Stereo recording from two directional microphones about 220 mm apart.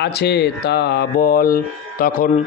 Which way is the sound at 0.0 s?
50° left (ahead or behind).